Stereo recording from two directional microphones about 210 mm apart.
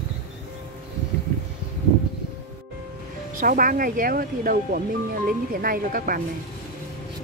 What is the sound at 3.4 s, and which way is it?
Speech, 40° right (ahead or behind).